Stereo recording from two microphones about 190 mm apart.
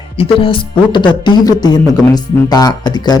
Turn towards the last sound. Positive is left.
turn(degrees=20)  # may be behind; listen again after turning